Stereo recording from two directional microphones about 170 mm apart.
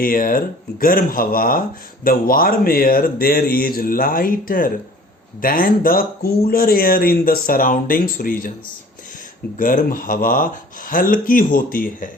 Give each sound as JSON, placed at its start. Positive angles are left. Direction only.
{"t": 0.0, "sound": "speech", "side_deg": 55}
{"t": 9.6, "sound": "speech", "side_deg": 55}